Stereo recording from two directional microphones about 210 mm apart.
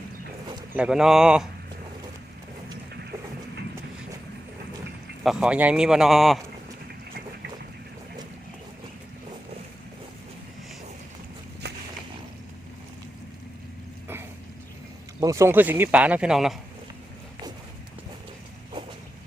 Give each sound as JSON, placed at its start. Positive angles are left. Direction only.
{"t": 0.5, "sound": "speech", "side_deg": -10}
{"t": 5.2, "sound": "a man's voice", "side_deg": -5}
{"t": 11.6, "sound": "boat", "side_deg": -50}
{"t": 15.2, "sound": "speech", "side_deg": -15}